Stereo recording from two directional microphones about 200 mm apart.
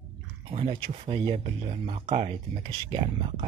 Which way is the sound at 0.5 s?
30° right (ahead or behind).